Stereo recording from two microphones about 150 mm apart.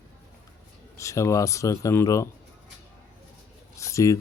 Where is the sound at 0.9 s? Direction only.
20° left (ahead or behind).